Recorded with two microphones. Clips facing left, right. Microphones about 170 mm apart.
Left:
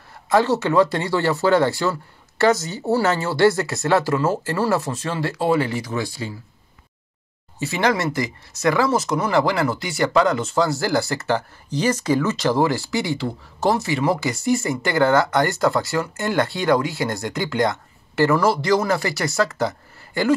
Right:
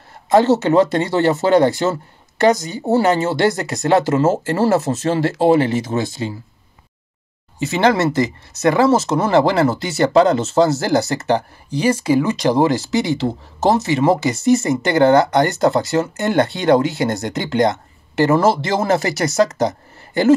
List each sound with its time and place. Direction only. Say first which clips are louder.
0.3 s speech: right 5 dB; 25° right (ahead or behind)
7.5 s speech: right 5 dB; 20° right (ahead or behind)